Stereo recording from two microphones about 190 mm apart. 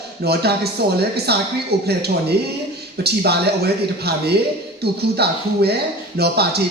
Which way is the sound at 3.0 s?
55° right (ahead or behind).